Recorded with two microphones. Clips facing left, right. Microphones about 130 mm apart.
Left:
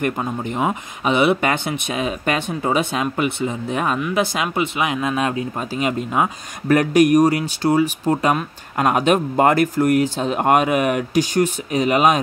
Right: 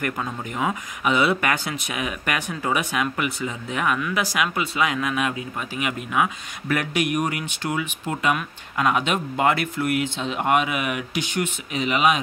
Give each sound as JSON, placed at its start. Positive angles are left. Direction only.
{"t": 0.0, "sound": "speech", "side_deg": 25}